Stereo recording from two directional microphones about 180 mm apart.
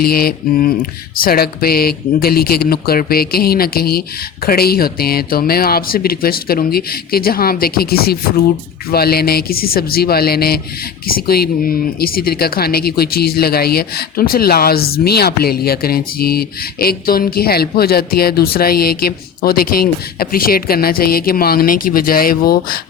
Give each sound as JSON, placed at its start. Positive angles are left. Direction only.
{"t": 0.0, "sound": "speech", "side_deg": 55}